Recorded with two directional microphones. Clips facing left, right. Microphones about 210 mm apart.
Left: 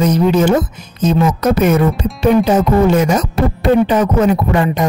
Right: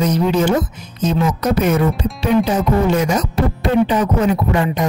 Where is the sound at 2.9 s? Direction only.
50° left (ahead or behind).